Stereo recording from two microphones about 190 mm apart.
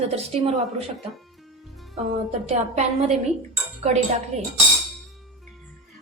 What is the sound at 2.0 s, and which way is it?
A woman's voice, 35° right (ahead or behind).